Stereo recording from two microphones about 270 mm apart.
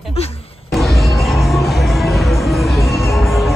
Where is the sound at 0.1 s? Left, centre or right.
Left.